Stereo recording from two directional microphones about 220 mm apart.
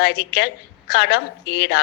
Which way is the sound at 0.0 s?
45° left (ahead or behind).